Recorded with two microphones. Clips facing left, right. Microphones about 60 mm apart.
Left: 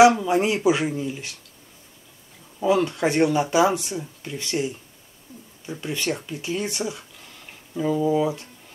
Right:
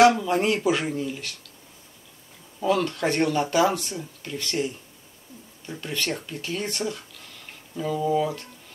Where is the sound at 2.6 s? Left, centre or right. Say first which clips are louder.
Left 3 dB; centre.